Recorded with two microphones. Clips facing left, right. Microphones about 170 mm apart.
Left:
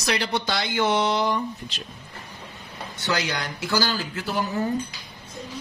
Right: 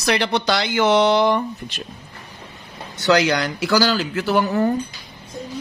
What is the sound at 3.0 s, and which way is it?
Speech, 85° right.